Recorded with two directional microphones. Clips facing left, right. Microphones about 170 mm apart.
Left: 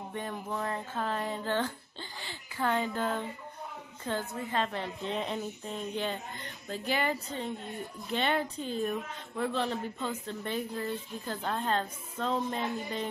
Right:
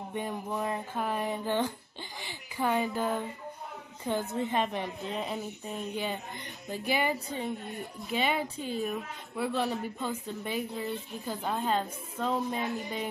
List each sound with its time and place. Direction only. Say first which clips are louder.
0.1 s a woman's voice: right 3 dB; 15° right (ahead or behind)
5.0 s speech: left 1 dB; 5° right (ahead or behind)